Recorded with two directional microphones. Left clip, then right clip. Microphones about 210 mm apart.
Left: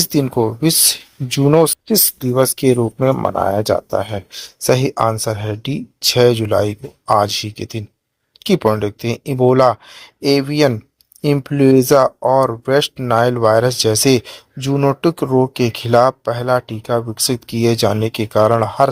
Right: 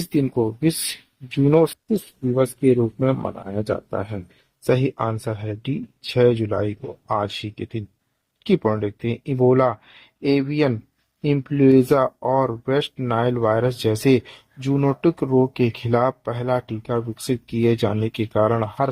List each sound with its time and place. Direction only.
0.1 s speech: 35° left (ahead or behind)